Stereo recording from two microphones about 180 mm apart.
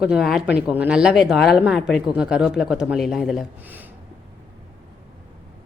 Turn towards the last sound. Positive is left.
turn(degrees=-10)  # may be behind; listen again after turning